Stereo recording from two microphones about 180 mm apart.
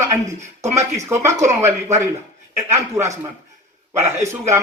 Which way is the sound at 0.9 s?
15° right (ahead or behind).